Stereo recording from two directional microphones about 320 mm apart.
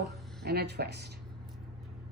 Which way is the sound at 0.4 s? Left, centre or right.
Right.